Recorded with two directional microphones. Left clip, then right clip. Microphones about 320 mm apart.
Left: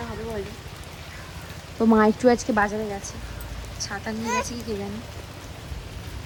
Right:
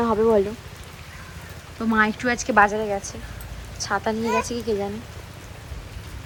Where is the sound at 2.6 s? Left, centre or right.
Centre.